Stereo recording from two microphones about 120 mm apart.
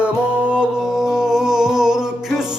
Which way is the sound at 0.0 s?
10° right (ahead or behind).